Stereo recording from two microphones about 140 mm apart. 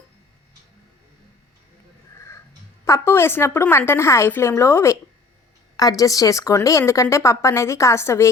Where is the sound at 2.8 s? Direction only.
20° left (ahead or behind).